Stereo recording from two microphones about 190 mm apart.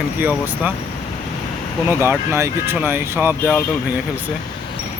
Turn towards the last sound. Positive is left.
turn(degrees=-5)  # may be behind; listen again after turning